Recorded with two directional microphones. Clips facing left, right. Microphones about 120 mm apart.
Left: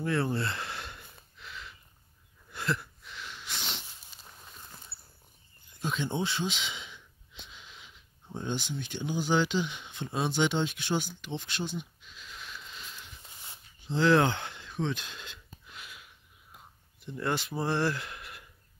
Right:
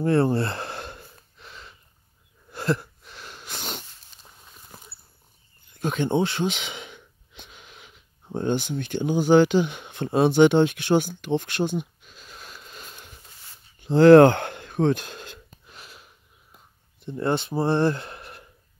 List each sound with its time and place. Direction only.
0.0 s speech: 35° right (ahead or behind)
0.4 s gasp: 40° right (ahead or behind)
2.5 s wheeze: 40° right (ahead or behind)
5.7 s speech: 55° right (ahead or behind)
13.7 s a sound: 55° right (ahead or behind); by 16.1 s 35° right (ahead or behind)
17.0 s speech: 30° right (ahead or behind)